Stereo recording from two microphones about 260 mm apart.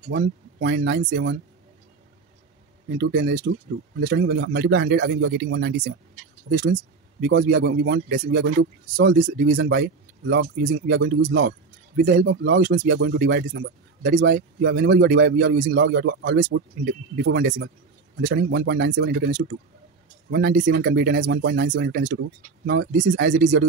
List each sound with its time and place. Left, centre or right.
0.1 s speech: right
3.0 s speech: right
9.1 s speech: right